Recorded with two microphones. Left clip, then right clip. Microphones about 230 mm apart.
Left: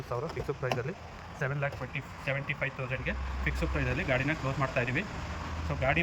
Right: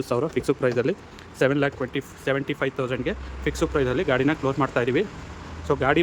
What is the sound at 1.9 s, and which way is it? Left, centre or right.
Speech, right.